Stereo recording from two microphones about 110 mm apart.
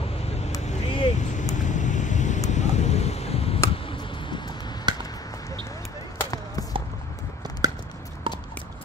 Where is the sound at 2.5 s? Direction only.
90° left; by 3.6 s 65° left (ahead or behind).